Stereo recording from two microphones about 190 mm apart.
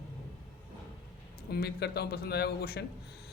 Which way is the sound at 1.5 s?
60° left (ahead or behind).